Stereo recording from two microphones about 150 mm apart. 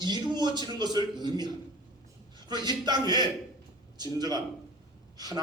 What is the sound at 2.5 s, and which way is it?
A man's voice, 30° right (ahead or behind).